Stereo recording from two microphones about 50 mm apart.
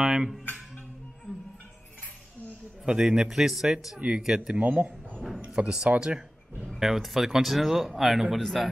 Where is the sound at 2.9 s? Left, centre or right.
Centre.